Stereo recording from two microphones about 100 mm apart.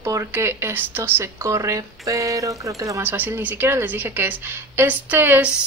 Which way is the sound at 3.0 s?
20° right (ahead or behind).